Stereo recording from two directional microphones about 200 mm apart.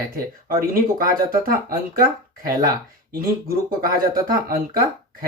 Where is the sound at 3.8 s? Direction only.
45° right (ahead or behind).